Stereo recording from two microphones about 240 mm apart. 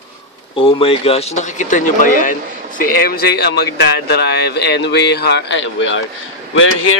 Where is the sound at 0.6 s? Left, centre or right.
Left.